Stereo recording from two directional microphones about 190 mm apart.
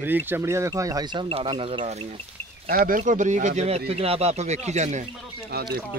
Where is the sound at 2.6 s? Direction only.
50° right (ahead or behind).